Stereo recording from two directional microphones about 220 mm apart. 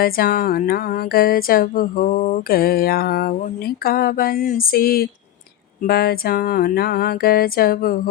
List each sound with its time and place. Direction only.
0.0 s music: 45° left (ahead or behind)